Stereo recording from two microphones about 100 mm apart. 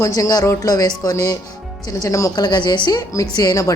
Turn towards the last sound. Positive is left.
turn(degrees=40)  # may be behind; listen again after turning